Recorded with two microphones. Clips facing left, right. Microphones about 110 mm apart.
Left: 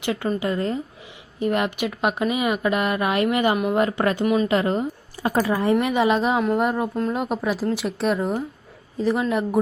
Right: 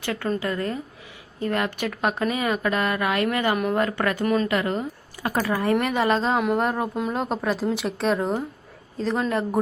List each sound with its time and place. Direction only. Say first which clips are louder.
0.0 s a woman's voice: left 2 dB; 15° left (ahead or behind)